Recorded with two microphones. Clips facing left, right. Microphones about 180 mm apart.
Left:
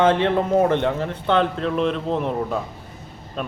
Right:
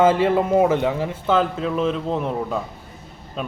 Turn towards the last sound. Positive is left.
turn(degrees=-5)  # may be behind; listen again after turning